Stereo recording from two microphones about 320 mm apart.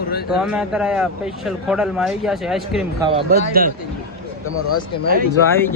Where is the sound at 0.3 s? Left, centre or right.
Centre.